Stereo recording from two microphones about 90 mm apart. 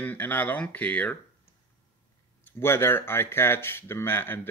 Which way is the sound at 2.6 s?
30° left (ahead or behind).